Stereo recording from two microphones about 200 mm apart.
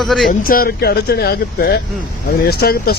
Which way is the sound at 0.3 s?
45° left (ahead or behind).